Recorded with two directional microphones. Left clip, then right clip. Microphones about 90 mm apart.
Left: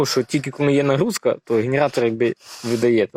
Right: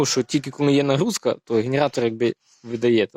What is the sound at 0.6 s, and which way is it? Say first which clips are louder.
Speech: left 1 dB; 30° right (ahead or behind).